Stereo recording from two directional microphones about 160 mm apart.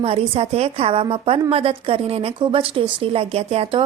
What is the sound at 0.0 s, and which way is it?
A woman's voice, 40° right (ahead or behind).